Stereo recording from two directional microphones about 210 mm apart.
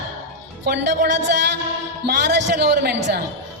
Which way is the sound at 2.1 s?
55° right (ahead or behind).